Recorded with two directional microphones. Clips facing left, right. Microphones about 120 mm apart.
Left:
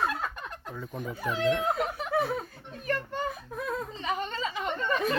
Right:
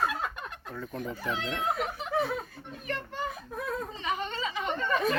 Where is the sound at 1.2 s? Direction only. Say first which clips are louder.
Left 4 dB; 45° left (ahead or behind).